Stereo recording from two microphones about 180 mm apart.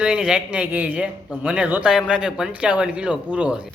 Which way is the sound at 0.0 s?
5° right (ahead or behind).